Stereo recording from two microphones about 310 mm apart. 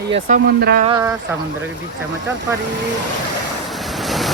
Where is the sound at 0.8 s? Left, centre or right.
Centre.